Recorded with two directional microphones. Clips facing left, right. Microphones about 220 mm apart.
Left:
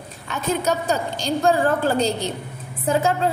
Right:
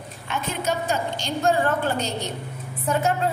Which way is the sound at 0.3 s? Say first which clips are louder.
Left 4 dB; 40° left (ahead or behind).